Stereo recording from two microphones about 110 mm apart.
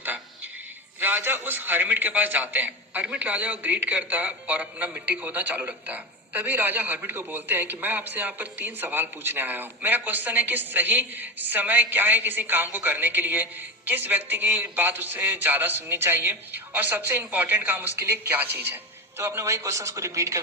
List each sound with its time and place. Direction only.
0.9 s a man's voice: 15° right (ahead or behind)